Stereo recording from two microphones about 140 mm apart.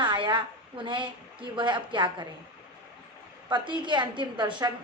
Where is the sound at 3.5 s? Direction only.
35° right (ahead or behind).